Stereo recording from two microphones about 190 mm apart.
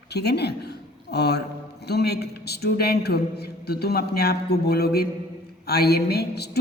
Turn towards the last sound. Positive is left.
turn(degrees=60)  # may be behind; listen again after turning